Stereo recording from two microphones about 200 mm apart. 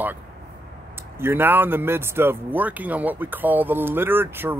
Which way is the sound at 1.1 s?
10° right (ahead or behind).